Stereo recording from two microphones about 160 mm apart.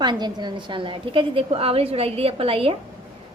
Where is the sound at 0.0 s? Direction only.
25° right (ahead or behind).